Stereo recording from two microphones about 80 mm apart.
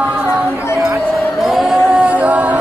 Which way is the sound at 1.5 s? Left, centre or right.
Centre.